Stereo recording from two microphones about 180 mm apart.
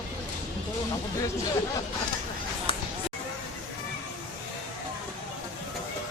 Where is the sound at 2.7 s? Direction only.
30° left (ahead or behind).